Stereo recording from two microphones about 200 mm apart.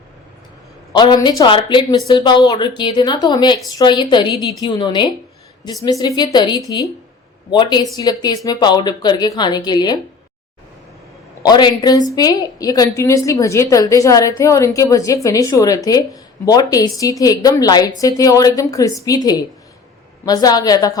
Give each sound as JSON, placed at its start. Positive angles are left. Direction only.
{"t": 0.9, "sound": "speech", "side_deg": 20}
{"t": 11.4, "sound": "a woman's voice", "side_deg": 20}